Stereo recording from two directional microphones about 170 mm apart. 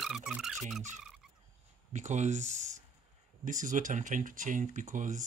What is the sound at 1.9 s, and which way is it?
Speech, 45° right (ahead or behind).